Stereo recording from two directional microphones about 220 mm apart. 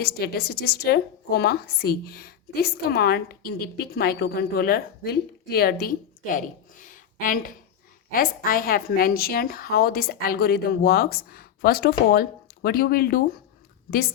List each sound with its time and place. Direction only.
0.0 s a woman's voice: 45° left (ahead or behind)